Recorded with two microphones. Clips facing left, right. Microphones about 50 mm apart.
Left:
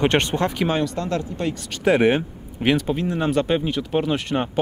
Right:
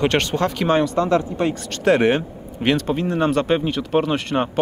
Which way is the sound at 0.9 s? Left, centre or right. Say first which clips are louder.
Right 7 dB; right.